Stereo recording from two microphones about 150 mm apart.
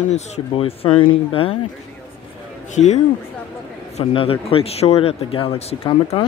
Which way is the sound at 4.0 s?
40° left (ahead or behind).